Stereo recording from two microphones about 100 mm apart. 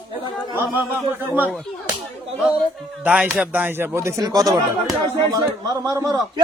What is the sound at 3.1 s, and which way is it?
Speech, 15° right (ahead or behind).